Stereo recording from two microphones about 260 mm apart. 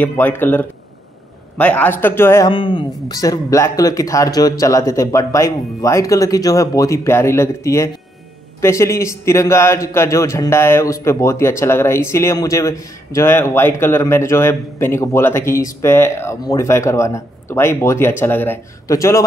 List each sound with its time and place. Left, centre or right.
0.0 s a man's voice: centre